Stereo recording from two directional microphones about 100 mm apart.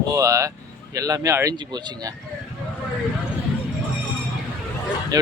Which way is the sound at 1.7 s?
45° right (ahead or behind).